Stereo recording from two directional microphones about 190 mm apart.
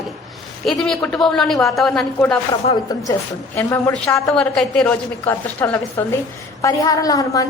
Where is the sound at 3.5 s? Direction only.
10° left (ahead or behind).